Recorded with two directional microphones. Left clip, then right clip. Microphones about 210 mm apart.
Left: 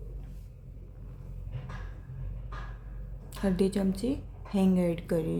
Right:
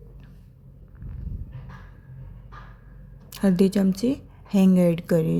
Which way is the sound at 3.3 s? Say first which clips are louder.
Right 7 dB; 30° right (ahead or behind).